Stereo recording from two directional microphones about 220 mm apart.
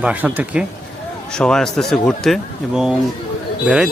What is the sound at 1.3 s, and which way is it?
Speech, 5° left (ahead or behind).